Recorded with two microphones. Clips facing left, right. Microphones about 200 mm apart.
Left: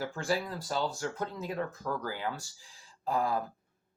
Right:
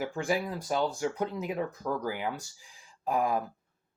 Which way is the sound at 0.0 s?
15° right (ahead or behind).